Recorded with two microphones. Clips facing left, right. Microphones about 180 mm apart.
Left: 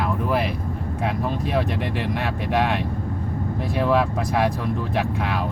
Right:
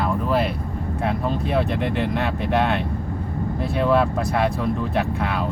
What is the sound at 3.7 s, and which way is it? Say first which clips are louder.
Speech: right 1 dB; 5° left (ahead or behind).